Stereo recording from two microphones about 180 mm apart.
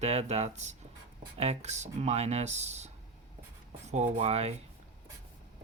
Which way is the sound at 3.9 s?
35° right (ahead or behind).